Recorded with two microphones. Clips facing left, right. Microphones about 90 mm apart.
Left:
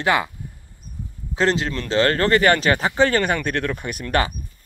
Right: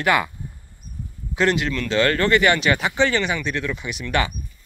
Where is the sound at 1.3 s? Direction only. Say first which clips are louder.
Even; 30° left (ahead or behind).